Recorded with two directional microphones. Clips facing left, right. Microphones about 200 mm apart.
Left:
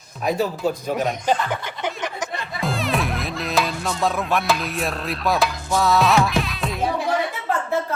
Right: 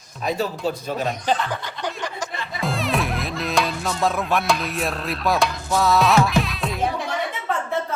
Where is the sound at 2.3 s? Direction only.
Centre (ahead or behind).